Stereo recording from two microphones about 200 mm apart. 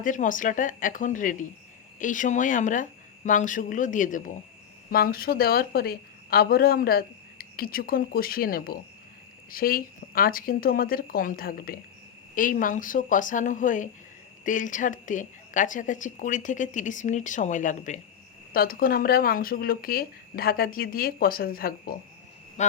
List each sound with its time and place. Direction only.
0.0 s a woman's voice: 40° left (ahead or behind)